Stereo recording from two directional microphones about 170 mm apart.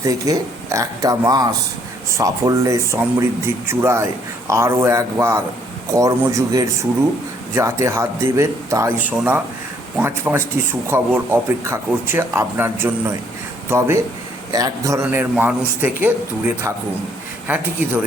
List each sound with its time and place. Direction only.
0.0 s speech: 20° right (ahead or behind)
17.5 s speech: 10° right (ahead or behind)